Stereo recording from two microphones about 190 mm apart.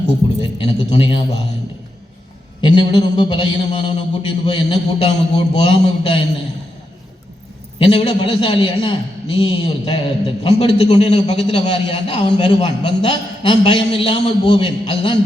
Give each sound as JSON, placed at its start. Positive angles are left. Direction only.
{"t": 0.4, "sound": "a man's voice", "side_deg": 25}
{"t": 2.6, "sound": "a man's voice", "side_deg": 25}
{"t": 7.8, "sound": "a man's voice", "side_deg": 30}